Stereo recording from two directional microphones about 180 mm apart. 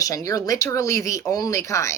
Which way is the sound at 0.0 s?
20° left (ahead or behind).